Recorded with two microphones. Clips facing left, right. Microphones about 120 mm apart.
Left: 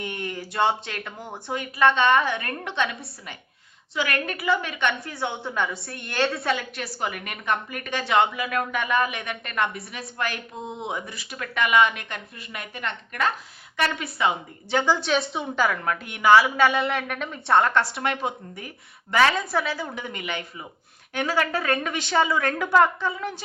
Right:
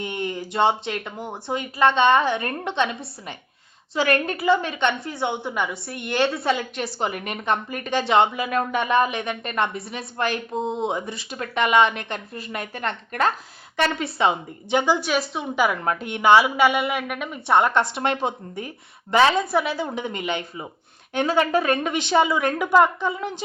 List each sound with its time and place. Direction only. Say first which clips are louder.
0.0 s a woman's voice: right 4 dB; 25° right (ahead or behind)
14.7 s a woman's voice: right 2 dB; 20° right (ahead or behind)
15.0 s speech: even; 5° right (ahead or behind)
15.5 s a woman's voice: right 3 dB; 15° right (ahead or behind)
16.7 s speech: right 1 dB; centre (ahead or behind)
17.5 s a woman's voice: right 1 dB; 20° right (ahead or behind)